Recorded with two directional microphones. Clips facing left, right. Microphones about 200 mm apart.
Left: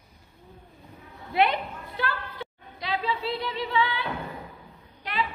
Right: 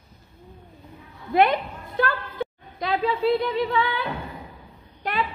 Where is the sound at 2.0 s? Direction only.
50° right (ahead or behind).